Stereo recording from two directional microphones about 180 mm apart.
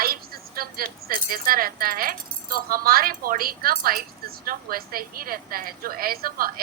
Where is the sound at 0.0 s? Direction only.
55° right (ahead or behind).